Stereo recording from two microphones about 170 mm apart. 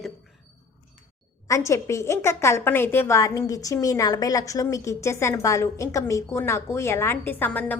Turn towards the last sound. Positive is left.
turn(degrees=10)  # may be behind; listen again after turning